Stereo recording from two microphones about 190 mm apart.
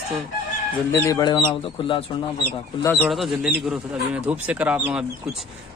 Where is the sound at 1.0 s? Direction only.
20° left (ahead or behind).